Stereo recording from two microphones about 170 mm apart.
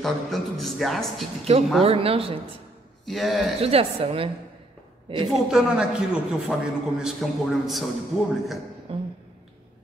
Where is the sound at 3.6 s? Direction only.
35° right (ahead or behind).